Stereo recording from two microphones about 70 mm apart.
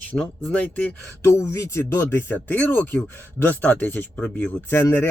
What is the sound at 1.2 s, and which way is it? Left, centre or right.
Speech, left.